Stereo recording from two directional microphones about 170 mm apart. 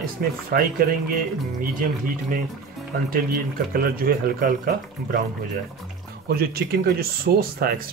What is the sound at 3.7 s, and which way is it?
Speech, 55° right (ahead or behind).